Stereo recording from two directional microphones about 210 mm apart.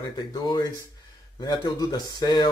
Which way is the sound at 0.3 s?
20° left (ahead or behind).